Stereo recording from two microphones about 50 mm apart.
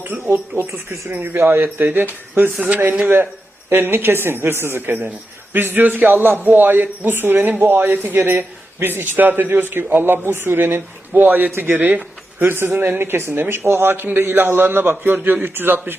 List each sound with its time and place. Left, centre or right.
0.3 s a man's voice: right
1.6 s a man's voice: right
2.6 s a man's voice: right
3.7 s a man's voice: right